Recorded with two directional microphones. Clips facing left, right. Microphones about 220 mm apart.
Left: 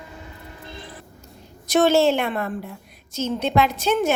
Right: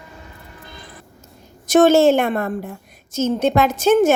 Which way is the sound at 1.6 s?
45° right (ahead or behind).